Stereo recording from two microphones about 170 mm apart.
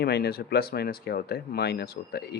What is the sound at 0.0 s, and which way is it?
Speech, 70° left (ahead or behind).